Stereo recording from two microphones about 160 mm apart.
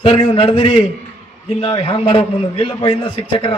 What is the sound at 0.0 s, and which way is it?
A man's voice, 35° left (ahead or behind).